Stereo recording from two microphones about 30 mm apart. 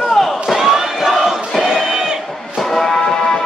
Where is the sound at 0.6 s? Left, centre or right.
Centre.